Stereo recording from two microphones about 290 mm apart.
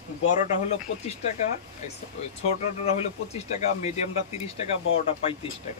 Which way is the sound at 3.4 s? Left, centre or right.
Left.